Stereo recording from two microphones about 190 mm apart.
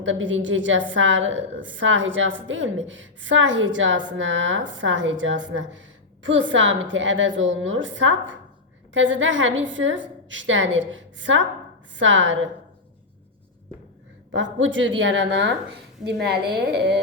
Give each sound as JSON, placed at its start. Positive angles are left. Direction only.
{"t": 0.0, "sound": "a woman's voice", "side_deg": -80}
{"t": 14.3, "sound": "a woman's voice", "side_deg": -80}